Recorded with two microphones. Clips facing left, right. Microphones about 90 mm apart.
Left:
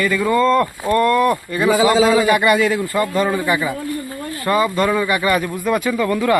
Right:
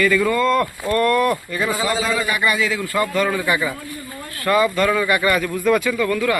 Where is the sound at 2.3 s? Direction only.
45° left (ahead or behind).